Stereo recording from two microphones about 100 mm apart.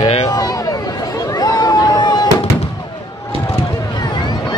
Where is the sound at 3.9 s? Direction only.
45° left (ahead or behind).